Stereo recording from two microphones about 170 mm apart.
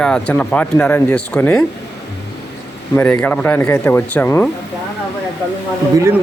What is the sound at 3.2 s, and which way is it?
Speech, 10° left (ahead or behind).